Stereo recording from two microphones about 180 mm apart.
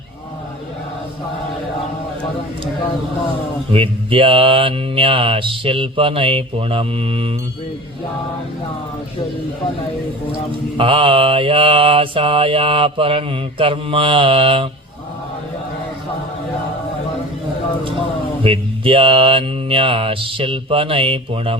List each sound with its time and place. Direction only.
3.7 s mantra: 30° right (ahead or behind)
10.8 s mantra: 30° right (ahead or behind)
18.4 s mantra: 30° right (ahead or behind)